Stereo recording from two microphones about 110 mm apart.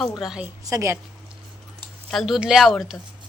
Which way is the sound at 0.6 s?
30° right (ahead or behind).